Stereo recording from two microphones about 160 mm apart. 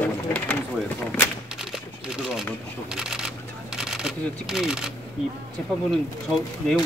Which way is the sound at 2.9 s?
5° right (ahead or behind).